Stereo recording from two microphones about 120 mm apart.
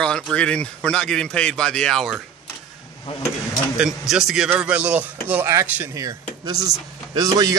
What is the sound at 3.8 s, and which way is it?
Speech, 5° right (ahead or behind).